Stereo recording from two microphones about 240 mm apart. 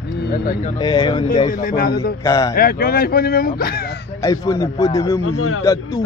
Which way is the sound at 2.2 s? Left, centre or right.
Centre.